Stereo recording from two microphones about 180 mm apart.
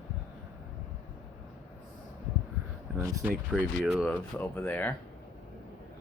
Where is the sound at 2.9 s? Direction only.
20° right (ahead or behind).